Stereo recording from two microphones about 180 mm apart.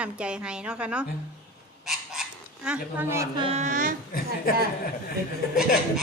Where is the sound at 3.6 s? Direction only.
45° right (ahead or behind).